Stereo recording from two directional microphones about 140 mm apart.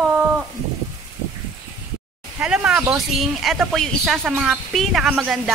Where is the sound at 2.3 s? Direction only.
10° right (ahead or behind).